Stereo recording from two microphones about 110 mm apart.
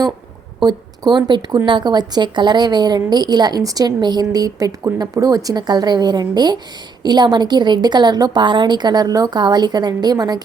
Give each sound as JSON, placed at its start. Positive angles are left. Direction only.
{"t": 0.6, "sound": "a woman's voice", "side_deg": -40}